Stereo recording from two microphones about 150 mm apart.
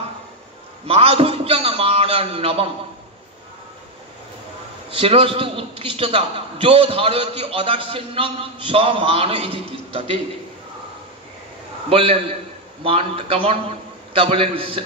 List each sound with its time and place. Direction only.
0.8 s a sound: 40° right (ahead or behind)
4.9 s a man's voice: 40° right (ahead or behind)
11.9 s a man's voice: 40° right (ahead or behind)